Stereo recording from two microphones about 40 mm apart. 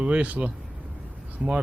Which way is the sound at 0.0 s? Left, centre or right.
Right.